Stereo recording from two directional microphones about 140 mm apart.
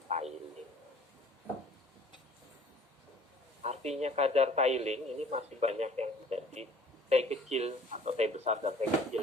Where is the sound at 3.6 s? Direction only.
50° right (ahead or behind).